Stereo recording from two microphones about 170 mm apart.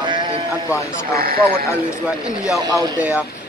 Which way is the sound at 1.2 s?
60° right (ahead or behind).